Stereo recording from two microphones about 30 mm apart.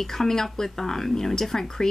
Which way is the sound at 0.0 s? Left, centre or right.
Centre.